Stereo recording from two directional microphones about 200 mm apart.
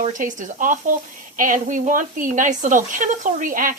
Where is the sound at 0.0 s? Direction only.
40° right (ahead or behind).